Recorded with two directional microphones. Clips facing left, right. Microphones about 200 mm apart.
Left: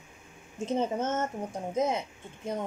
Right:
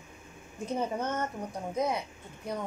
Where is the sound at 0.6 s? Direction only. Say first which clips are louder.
Left 3 dB; 25° left (ahead or behind).